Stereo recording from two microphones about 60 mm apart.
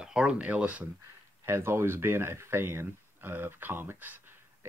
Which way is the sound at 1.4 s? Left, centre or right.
Right.